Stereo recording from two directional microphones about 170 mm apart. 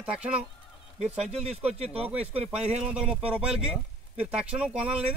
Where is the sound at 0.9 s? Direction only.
40° right (ahead or behind).